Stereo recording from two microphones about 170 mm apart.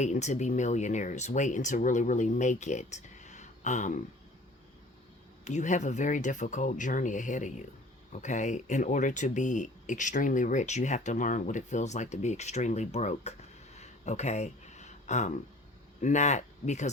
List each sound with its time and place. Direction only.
0.0 s speech: 45° left (ahead or behind)
5.5 s speech: 45° left (ahead or behind)
13.7 s a sound: 40° left (ahead or behind)
16.0 s speech: 45° left (ahead or behind)